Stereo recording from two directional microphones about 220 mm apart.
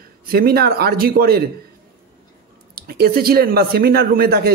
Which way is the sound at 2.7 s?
45° right (ahead or behind).